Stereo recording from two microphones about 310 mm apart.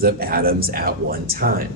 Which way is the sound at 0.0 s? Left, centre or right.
Right.